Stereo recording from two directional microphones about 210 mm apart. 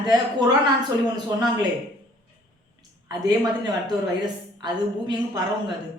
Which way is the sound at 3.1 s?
20° right (ahead or behind).